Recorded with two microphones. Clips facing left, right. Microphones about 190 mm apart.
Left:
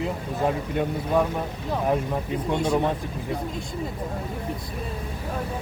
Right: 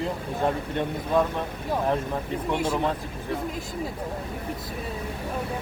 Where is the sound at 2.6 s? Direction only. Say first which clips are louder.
Left 4 dB; 15° left (ahead or behind).